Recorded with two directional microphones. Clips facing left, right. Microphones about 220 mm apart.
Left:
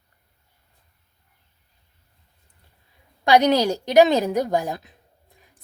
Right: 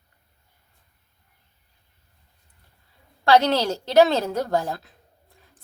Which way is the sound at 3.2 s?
15° left (ahead or behind).